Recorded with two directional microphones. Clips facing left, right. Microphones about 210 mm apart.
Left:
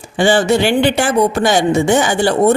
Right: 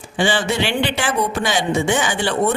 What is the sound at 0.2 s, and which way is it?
Speech, 45° left (ahead or behind).